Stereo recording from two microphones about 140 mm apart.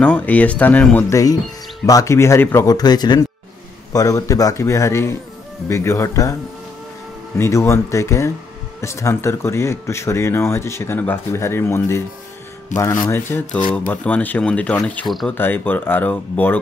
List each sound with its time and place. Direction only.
0.0 s speech: 10° left (ahead or behind)
1.9 s speech: 25° left (ahead or behind)
7.3 s speech: 20° left (ahead or behind)
12.7 s speech: 65° left (ahead or behind)
13.1 s speech: 15° left (ahead or behind)
15.3 s speech: 15° left (ahead or behind)